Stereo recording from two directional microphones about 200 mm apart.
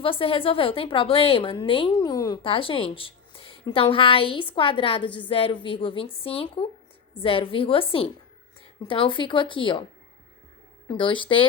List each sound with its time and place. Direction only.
0.0 s a woman's voice: 30° left (ahead or behind)
10.8 s a woman's voice: 25° left (ahead or behind)